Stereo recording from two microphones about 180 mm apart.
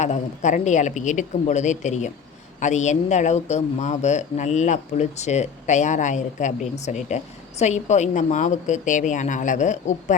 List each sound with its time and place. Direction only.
0.0 s speech: 40° left (ahead or behind)